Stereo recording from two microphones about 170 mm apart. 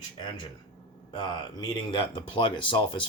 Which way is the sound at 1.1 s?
30° left (ahead or behind).